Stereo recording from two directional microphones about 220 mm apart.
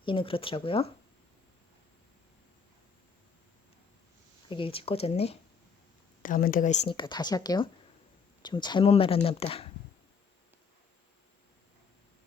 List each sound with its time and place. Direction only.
0.0 s speech: 25° left (ahead or behind)
4.4 s speech: 25° left (ahead or behind)
6.2 s speech: 40° left (ahead or behind)
6.8 s speech: 20° left (ahead or behind)